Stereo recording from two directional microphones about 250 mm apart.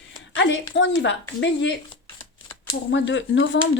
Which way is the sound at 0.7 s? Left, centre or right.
Left.